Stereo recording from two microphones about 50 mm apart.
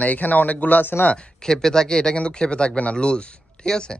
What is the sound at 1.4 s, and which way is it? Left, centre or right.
Speech, centre.